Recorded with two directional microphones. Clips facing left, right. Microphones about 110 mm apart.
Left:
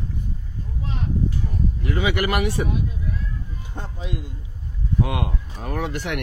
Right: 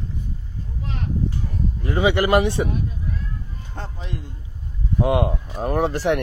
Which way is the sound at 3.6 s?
10° left (ahead or behind).